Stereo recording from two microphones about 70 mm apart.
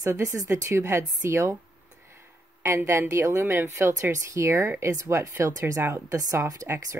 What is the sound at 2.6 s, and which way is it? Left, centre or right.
A woman's voice, right.